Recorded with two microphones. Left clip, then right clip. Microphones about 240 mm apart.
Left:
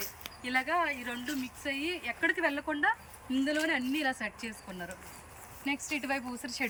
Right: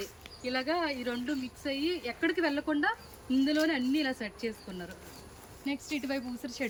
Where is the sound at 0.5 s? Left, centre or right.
Centre.